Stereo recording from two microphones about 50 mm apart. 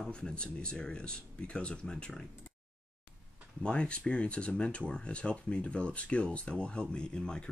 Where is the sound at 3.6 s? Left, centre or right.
Centre.